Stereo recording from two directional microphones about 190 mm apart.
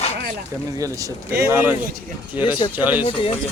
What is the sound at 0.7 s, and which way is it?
Speech, 15° right (ahead or behind).